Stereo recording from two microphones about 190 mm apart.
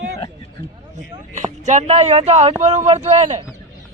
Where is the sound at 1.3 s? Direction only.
40° right (ahead or behind).